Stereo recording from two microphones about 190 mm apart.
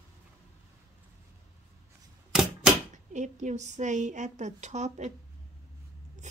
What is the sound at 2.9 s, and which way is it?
A woman's voice, 40° right (ahead or behind).